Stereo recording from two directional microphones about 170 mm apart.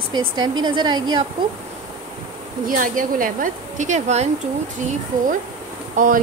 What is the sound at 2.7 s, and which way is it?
A woman's voice, 55° right (ahead or behind).